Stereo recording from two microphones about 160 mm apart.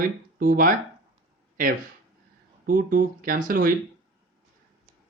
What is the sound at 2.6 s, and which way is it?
Speech, 60° right (ahead or behind).